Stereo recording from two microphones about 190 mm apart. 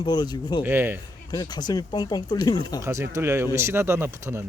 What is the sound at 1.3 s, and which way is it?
Speech, 20° left (ahead or behind).